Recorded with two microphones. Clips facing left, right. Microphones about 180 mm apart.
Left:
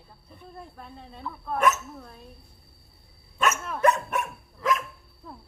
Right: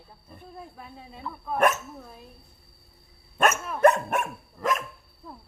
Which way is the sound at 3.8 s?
50° right (ahead or behind).